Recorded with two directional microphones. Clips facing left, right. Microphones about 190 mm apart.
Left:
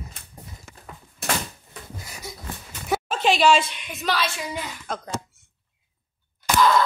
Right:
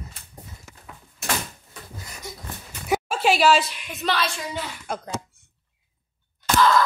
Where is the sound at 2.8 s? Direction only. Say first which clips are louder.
Right 1 dB; 5° right (ahead or behind).